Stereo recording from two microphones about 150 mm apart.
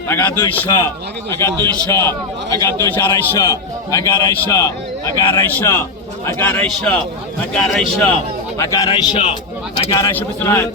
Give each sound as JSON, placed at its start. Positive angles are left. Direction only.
{"t": 0.1, "sound": "a man's voice", "side_deg": 15}
{"t": 8.5, "sound": "a man's voice", "side_deg": 20}
{"t": 10.2, "sound": "a man's voice", "side_deg": 15}